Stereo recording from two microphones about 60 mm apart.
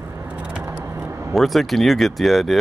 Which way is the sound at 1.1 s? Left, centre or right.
Right.